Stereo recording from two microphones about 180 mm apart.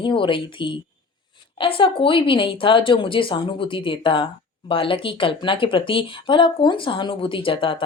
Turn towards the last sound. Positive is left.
turn(degrees=30)  # may be behind; listen again after turning